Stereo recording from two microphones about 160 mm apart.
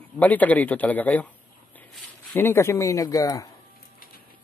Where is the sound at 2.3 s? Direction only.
15° left (ahead or behind).